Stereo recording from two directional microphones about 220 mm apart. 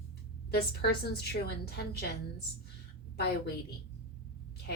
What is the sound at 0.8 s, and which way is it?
Speech, 45° left (ahead or behind).